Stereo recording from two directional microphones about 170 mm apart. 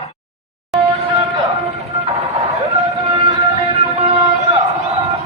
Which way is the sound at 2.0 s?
40° right (ahead or behind).